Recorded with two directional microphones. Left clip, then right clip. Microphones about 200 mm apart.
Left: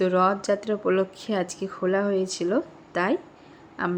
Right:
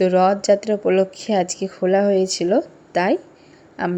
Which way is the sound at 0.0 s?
15° right (ahead or behind).